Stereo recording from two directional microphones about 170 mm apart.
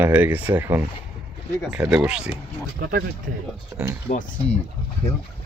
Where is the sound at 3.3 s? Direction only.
60° right (ahead or behind).